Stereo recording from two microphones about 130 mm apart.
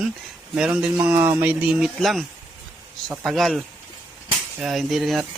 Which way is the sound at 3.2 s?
Centre (ahead or behind).